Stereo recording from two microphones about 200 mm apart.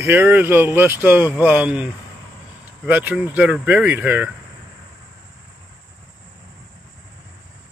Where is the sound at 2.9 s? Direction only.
10° right (ahead or behind).